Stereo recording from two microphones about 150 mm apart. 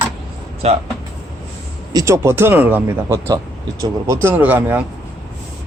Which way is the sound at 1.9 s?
20° right (ahead or behind).